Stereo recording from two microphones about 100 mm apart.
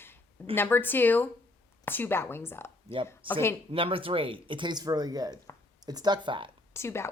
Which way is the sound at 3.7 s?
60° right (ahead or behind).